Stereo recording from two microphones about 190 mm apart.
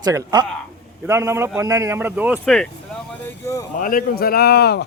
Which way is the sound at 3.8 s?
45° left (ahead or behind).